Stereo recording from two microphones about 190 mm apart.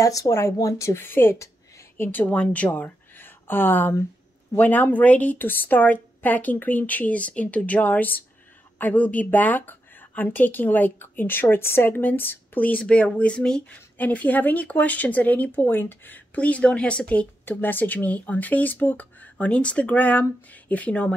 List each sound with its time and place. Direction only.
0.0 s a woman's voice: 15° left (ahead or behind)